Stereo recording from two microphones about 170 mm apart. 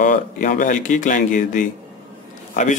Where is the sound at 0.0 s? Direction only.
55° left (ahead or behind).